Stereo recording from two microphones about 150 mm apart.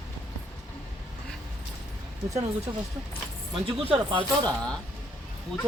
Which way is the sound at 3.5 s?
35° right (ahead or behind).